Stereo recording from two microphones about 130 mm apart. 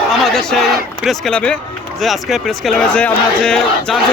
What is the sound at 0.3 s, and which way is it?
Speech, centre (ahead or behind).